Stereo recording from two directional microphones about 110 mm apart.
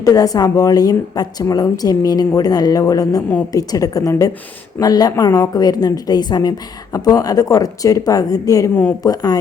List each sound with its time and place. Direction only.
0.0 s a woman's voice: 35° left (ahead or behind)